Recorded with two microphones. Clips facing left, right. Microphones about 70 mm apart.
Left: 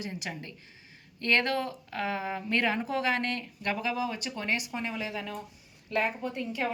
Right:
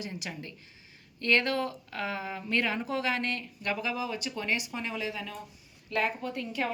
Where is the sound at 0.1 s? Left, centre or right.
Left.